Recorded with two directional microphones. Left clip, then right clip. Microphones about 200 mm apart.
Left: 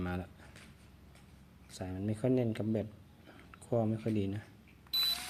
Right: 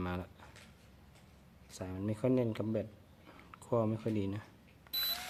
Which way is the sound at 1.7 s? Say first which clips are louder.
Even; 10° right (ahead or behind).